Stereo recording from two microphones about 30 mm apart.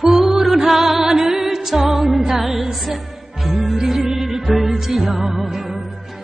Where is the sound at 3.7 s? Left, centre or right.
Centre.